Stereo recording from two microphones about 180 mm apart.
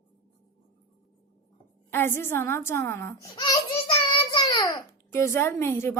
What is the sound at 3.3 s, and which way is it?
Babbling, 25° left (ahead or behind).